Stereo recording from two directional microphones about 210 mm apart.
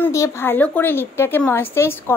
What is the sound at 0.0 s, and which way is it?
A woman's voice, 15° left (ahead or behind).